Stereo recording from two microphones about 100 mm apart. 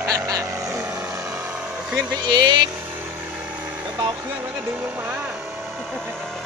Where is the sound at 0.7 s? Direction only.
30° right (ahead or behind).